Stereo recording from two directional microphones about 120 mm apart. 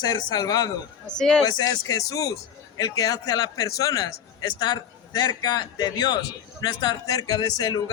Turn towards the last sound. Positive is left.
turn(degrees=35)  # may be behind; listen again after turning